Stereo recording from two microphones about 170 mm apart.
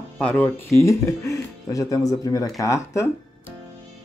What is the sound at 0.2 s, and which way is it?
Speech, 10° left (ahead or behind).